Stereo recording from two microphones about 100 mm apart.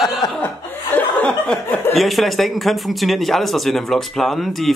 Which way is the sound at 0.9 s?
10° left (ahead or behind).